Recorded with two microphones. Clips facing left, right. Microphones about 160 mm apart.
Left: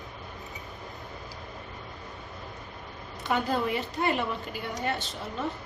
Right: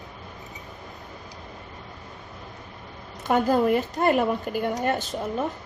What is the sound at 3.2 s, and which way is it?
A woman's voice, 45° right (ahead or behind).